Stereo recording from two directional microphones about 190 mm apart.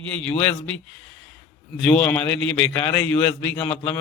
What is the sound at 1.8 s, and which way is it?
Speech, 5° left (ahead or behind).